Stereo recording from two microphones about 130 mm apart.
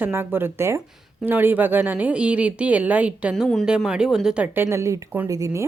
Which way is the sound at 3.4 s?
5° left (ahead or behind).